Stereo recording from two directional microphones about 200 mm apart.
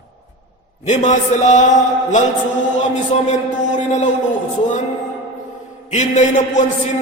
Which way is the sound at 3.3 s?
35° left (ahead or behind).